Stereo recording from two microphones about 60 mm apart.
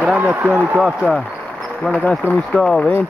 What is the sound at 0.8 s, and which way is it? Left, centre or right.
Speech, centre.